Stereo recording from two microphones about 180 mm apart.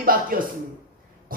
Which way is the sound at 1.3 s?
50° right (ahead or behind).